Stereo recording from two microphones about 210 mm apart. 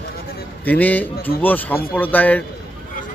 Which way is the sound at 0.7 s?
10° left (ahead or behind).